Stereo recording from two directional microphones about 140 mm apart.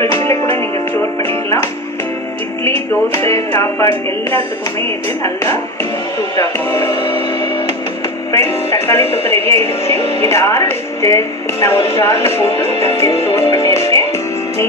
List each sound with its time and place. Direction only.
0.3 s music: 15° left (ahead or behind)
3.1 s music: 20° left (ahead or behind)
6.9 s music: 35° left (ahead or behind)
8.3 s music: 20° left (ahead or behind)